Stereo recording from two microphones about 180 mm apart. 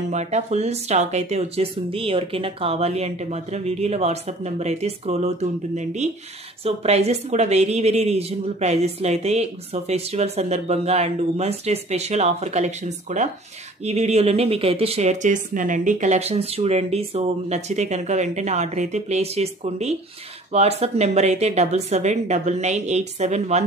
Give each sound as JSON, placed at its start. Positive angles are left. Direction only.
{"t": 0.1, "sound": "a woman's voice", "side_deg": -40}